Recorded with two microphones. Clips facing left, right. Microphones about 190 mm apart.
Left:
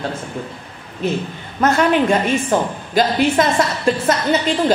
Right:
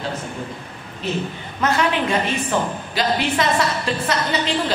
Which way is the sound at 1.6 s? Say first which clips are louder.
Left 5 dB; 50° left (ahead or behind).